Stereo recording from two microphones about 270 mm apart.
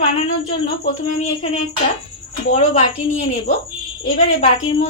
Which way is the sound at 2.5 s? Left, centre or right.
Left.